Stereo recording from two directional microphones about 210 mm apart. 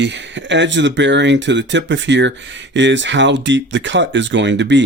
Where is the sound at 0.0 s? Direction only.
55° right (ahead or behind).